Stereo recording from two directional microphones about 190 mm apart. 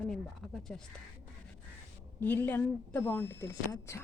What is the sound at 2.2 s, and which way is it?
Speech, 10° left (ahead or behind).